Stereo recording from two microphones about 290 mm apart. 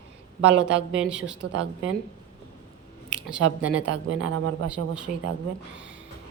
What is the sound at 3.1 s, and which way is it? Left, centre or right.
Speech, centre.